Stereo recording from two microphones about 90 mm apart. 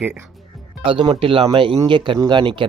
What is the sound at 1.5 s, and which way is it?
Speech, 70° right (ahead or behind).